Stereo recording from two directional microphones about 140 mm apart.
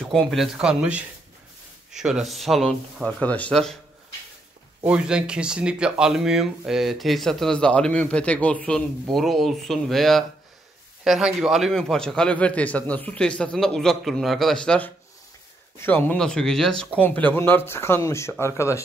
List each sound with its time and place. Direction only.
0.0 s speech: 5° left (ahead or behind)
4.8 s speech: 5° right (ahead or behind); by 18.8 s 20° left (ahead or behind)